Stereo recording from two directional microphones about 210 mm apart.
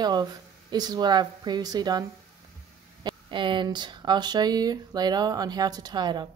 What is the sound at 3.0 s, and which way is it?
Speech, 25° right (ahead or behind).